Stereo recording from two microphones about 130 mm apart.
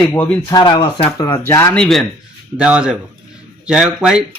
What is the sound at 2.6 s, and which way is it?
A man's voice, 10° right (ahead or behind).